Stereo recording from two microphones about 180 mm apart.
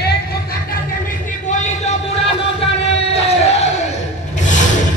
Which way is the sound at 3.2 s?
35° left (ahead or behind).